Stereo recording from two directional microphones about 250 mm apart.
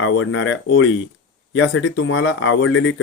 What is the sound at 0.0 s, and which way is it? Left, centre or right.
Speech, left.